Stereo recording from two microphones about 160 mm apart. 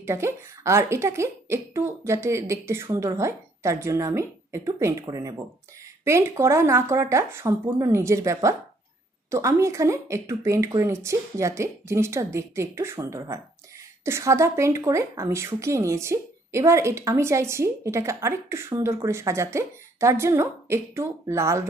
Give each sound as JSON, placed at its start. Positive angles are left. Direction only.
{"t": 0.0, "sound": "a woman's voice", "side_deg": -15}